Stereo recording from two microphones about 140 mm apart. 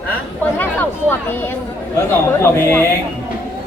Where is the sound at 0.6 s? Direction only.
15° left (ahead or behind).